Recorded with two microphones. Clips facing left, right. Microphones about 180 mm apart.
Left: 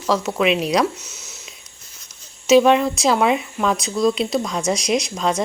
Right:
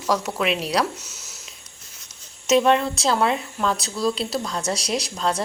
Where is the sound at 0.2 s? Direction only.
5° left (ahead or behind).